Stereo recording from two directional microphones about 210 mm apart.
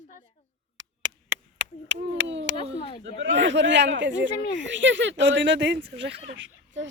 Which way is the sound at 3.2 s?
60° right (ahead or behind).